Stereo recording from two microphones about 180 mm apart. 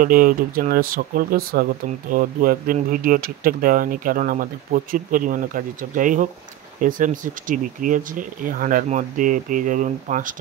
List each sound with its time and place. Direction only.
0.0 s speech: 50° right (ahead or behind)